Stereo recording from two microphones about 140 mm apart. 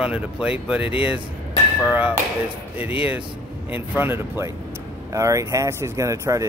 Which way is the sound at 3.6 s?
15° right (ahead or behind).